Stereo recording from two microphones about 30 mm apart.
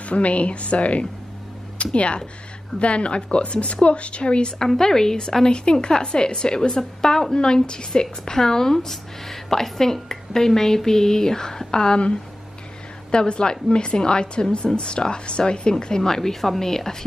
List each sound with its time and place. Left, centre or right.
0.1 s a woman's voice: left
4.6 s speech: centre
6.7 s a woman's voice: centre
7.3 s speech: left
13.1 s a woman's voice: left; by 16.9 s centre